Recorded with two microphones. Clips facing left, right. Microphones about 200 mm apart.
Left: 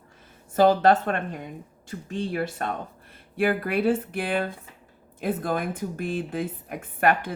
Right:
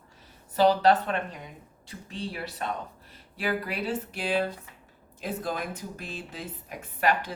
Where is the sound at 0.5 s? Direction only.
50° left (ahead or behind).